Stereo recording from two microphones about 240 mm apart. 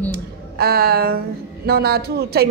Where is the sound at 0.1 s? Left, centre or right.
Right.